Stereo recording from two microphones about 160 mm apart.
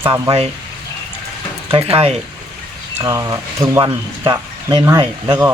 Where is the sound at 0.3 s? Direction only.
40° right (ahead or behind).